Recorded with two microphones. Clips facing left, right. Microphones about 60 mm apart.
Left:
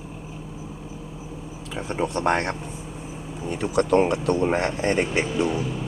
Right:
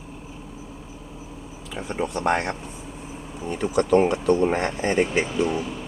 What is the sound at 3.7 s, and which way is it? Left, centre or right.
Speech, left.